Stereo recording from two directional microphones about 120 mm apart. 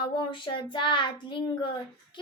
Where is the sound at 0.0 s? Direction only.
45° left (ahead or behind).